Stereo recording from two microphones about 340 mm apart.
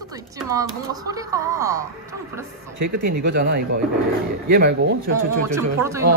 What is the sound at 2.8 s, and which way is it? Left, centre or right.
Speech, right.